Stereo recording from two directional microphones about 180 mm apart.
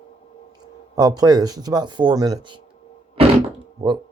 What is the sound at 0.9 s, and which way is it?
Speech, 20° right (ahead or behind).